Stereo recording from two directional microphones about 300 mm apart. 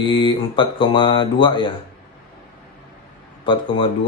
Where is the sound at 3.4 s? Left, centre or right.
Centre.